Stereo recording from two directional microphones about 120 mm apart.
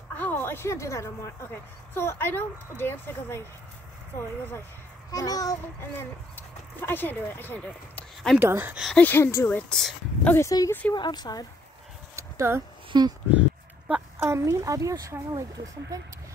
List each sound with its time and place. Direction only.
0.1 s a woman's voice: 15° left (ahead or behind)
5.1 s a woman's voice: 30° left (ahead or behind)
5.9 s speech: 15° left (ahead or behind)
8.4 s speech: 20° right (ahead or behind)
8.9 s a woman's voice: 15° left (ahead or behind)
9.6 s speech: 5° left (ahead or behind)
10.2 s a woman's voice: 20° left (ahead or behind)
11.0 s speech: 35° left (ahead or behind)
12.2 s a sound: 25° right (ahead or behind)
12.9 s speech: 35° right (ahead or behind)
13.3 s speech: 10° right (ahead or behind); by 16.1 s 25° right (ahead or behind)